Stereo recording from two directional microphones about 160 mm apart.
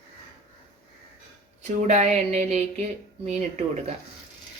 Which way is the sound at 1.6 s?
45° right (ahead or behind).